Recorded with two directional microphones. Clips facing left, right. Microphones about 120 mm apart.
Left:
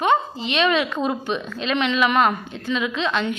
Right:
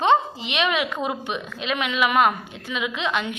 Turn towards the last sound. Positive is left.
turn(degrees=-15)  # may be behind; listen again after turning